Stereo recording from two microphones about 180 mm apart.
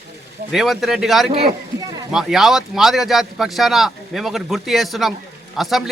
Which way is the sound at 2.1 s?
Centre (ahead or behind).